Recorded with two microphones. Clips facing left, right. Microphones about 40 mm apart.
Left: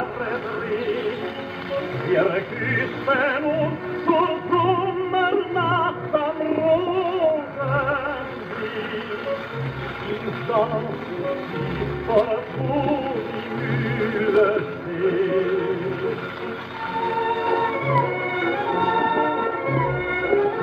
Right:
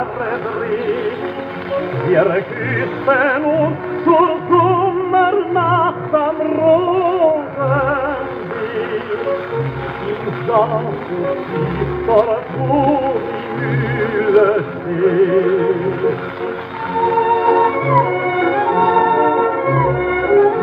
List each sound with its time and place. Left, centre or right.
0.3 s music: right
10.5 s music: right